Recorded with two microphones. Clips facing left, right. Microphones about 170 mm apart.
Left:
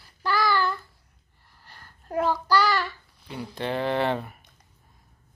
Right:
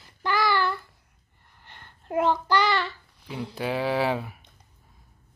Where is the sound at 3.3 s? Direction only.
5° right (ahead or behind).